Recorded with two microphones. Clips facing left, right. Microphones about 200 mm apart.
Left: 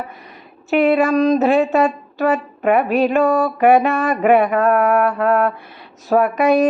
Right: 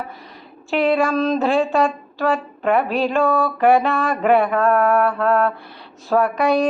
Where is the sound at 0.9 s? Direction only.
15° left (ahead or behind).